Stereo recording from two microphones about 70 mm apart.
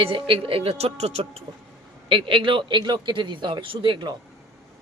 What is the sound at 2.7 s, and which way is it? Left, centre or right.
A man's voice, right.